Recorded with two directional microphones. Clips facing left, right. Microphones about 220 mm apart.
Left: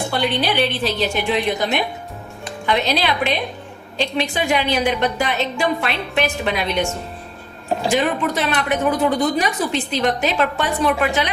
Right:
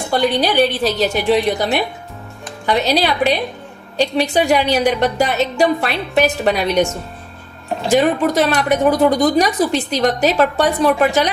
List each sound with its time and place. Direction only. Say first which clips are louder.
0.1 s a woman's voice: right 7 dB; 40° right (ahead or behind)
7.9 s a woman's voice: right 6 dB; 40° right (ahead or behind)